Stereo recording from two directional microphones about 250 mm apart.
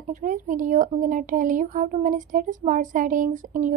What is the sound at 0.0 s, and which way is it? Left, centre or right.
A woman's voice, right.